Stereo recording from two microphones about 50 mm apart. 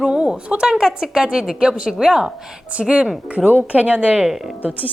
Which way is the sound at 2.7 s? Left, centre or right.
Right.